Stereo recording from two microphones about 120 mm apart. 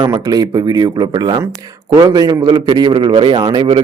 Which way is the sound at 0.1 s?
35° right (ahead or behind).